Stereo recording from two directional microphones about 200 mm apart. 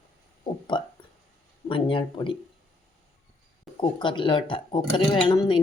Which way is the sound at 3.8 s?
25° left (ahead or behind).